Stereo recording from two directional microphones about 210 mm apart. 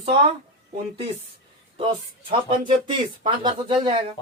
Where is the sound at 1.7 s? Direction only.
25° right (ahead or behind).